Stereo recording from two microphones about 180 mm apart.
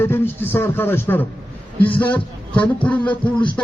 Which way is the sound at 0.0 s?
10° left (ahead or behind).